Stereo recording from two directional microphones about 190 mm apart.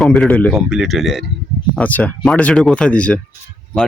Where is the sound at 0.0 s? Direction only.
5° left (ahead or behind).